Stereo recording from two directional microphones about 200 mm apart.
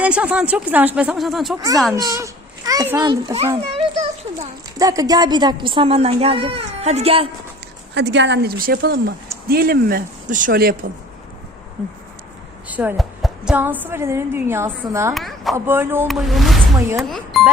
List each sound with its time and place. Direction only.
0.0 s speech: 5° right (ahead or behind)
1.5 s a woman's voice: 15° right (ahead or behind)
4.8 s a woman's voice: 15° right (ahead or behind)
7.9 s speech: 60° right (ahead or behind)
12.6 s a woman's voice: 10° right (ahead or behind)
15.1 s speech: centre (ahead or behind)
15.5 s a woman's voice: 10° right (ahead or behind)
16.0 s speech: centre (ahead or behind)